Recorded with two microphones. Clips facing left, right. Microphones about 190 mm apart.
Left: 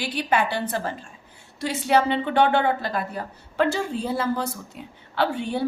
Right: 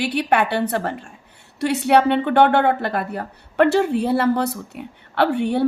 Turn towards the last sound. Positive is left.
turn(degrees=-65)  # may be behind; listen again after turning